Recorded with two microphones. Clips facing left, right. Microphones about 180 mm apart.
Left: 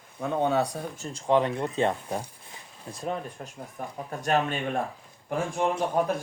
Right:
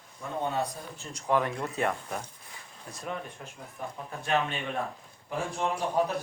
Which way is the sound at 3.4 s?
45° left (ahead or behind).